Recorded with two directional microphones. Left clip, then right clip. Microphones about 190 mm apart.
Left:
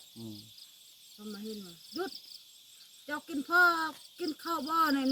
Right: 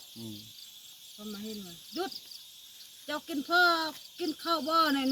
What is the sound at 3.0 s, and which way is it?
Speech, 10° right (ahead or behind).